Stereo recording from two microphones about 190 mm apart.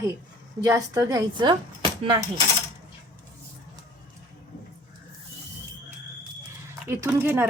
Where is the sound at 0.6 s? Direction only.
20° right (ahead or behind).